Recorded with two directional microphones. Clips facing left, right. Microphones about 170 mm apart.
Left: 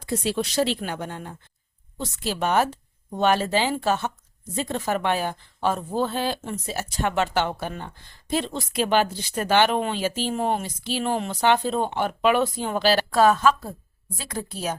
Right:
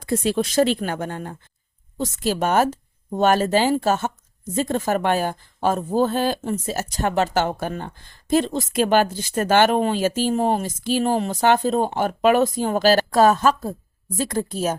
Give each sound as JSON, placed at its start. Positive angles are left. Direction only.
{"t": 0.0, "sound": "a woman's voice", "side_deg": -50}